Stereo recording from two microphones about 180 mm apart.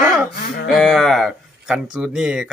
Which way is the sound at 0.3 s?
65° left (ahead or behind).